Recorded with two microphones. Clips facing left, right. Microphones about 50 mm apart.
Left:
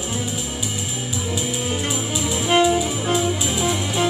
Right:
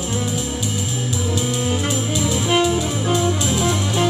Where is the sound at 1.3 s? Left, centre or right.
Centre.